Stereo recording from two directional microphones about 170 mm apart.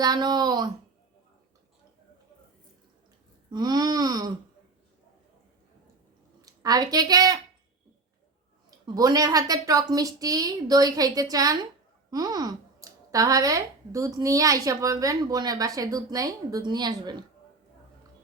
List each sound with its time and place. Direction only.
0.0 s speech: 25° right (ahead or behind)
3.5 s speech: 25° right (ahead or behind)
6.4 s a woman's voice: 20° right (ahead or behind)
9.0 s speech: 20° right (ahead or behind)